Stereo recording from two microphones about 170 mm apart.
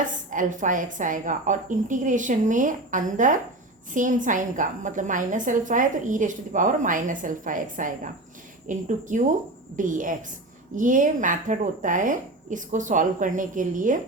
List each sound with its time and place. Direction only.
0.0 s a woman's voice: 50° right (ahead or behind)